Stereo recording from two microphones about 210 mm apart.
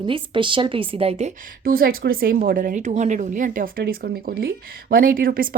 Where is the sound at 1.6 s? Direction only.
45° right (ahead or behind).